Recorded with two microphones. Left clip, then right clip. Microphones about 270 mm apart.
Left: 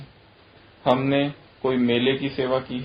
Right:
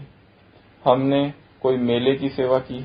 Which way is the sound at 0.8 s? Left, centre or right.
Right.